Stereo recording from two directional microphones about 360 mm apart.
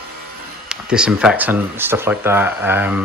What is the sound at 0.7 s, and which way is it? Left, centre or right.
Speech, centre.